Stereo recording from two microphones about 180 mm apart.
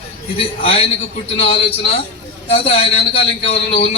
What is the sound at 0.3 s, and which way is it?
A man's voice, 30° left (ahead or behind).